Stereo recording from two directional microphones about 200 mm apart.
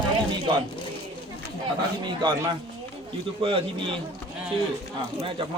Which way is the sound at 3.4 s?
25° right (ahead or behind).